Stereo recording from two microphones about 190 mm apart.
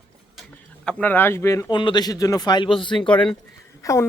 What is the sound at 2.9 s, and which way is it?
Speech, 5° left (ahead or behind).